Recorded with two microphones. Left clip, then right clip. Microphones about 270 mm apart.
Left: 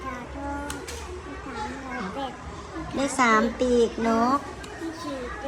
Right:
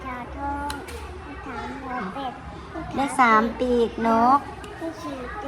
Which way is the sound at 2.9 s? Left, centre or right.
Centre.